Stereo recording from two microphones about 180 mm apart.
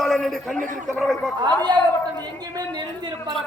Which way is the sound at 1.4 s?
25° right (ahead or behind).